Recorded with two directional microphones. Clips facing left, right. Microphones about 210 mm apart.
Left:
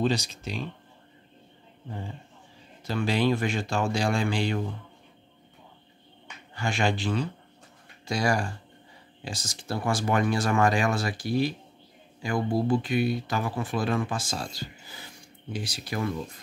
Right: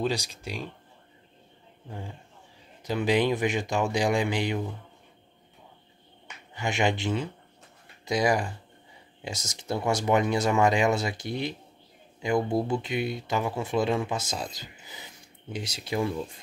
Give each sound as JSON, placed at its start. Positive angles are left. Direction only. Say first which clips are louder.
{"t": 0.0, "sound": "speech", "louder": "left 2 dB", "side_deg": -10}
{"t": 1.9, "sound": "speech", "louder": "left 2 dB", "side_deg": 0}
{"t": 2.9, "sound": "speech", "louder": "right 1 dB", "side_deg": -20}
{"t": 6.5, "sound": "speech", "louder": "right 1 dB", "side_deg": -20}